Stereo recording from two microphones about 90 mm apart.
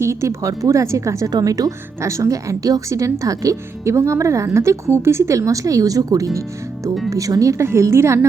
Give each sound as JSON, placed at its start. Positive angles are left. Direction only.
{"t": 0.0, "sound": "speech", "side_deg": -30}
{"t": 1.3, "sound": "speech", "side_deg": -45}